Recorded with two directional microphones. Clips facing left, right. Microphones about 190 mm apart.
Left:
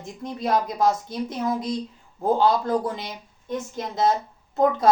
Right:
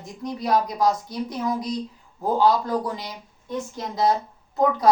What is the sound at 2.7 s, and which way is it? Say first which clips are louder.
Speech: left 2 dB; 25° left (ahead or behind).